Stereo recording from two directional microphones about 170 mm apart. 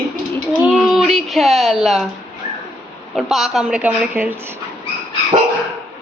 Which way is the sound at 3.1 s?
Centre (ahead or behind).